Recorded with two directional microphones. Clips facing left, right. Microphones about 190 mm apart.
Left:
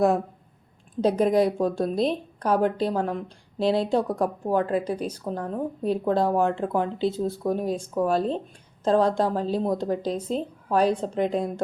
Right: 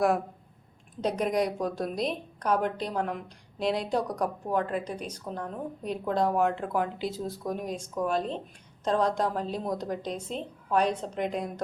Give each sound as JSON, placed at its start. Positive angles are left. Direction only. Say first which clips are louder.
{"t": 1.0, "sound": "a woman's voice", "louder": "left 7 dB", "side_deg": 30}